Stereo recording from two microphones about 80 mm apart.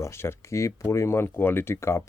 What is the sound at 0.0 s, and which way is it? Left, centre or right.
Speech, left.